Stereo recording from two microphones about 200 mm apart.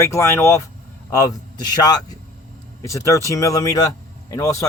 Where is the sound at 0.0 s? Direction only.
15° left (ahead or behind).